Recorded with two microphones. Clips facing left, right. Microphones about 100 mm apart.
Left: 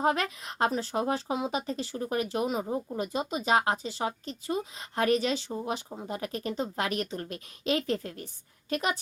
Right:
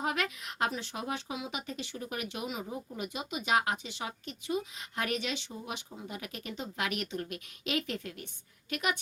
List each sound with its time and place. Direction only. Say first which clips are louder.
0.0 s speech: left 6 dB; 35° left (ahead or behind)